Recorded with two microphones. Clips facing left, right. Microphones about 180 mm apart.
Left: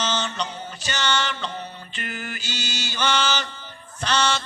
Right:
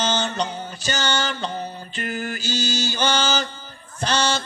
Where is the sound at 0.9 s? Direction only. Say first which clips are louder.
Right 1 dB; 35° right (ahead or behind).